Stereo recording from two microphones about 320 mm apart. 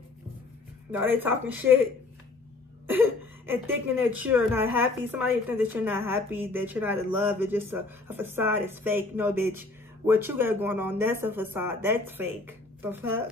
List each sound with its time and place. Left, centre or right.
0.9 s speech: centre
2.9 s a woman's voice: centre